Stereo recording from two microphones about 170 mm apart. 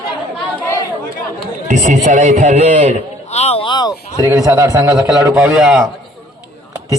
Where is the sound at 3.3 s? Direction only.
40° left (ahead or behind).